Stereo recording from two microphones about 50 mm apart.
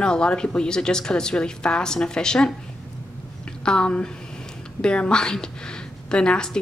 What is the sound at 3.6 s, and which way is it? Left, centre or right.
A woman's voice, centre.